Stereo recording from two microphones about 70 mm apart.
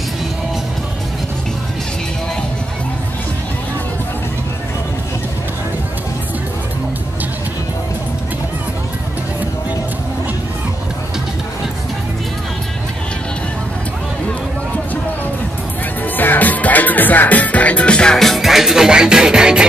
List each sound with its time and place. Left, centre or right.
16.2 s music: left; by 19.6 s centre